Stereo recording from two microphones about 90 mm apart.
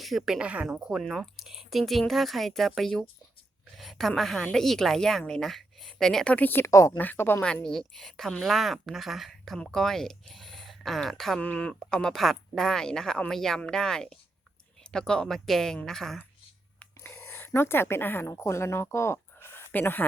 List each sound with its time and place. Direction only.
0.0 s a woman's voice: centre (ahead or behind)
6.3 s speech: 20° left (ahead or behind)
6.7 s speech: 35° left (ahead or behind)
7.0 s speech: 20° left (ahead or behind)
7.4 s speech: 10° left (ahead or behind)
11.4 s speech: 15° left (ahead or behind)
17.3 s speech: 30° left (ahead or behind)